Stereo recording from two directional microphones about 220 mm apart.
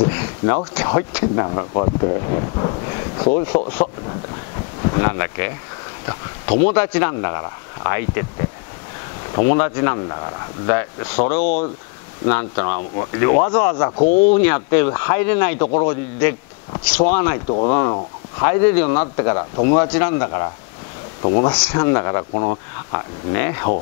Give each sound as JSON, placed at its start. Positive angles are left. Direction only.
{"t": 0.0, "sound": "speech", "side_deg": 20}
{"t": 4.8, "sound": "speech", "side_deg": 20}
{"t": 6.6, "sound": "speech", "side_deg": 10}
{"t": 9.5, "sound": "speech", "side_deg": 15}
{"t": 11.2, "sound": "speech", "side_deg": 40}
{"t": 12.3, "sound": "speech", "side_deg": 15}
{"t": 13.9, "sound": "speech", "side_deg": 40}
{"t": 14.3, "sound": "a man's voice", "side_deg": 15}
{"t": 17.5, "sound": "speech", "side_deg": 30}
{"t": 21.2, "sound": "speech", "side_deg": 25}